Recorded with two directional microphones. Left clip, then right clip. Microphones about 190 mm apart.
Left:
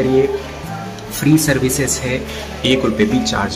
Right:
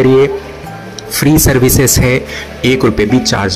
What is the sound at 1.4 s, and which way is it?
Speech, 25° right (ahead or behind).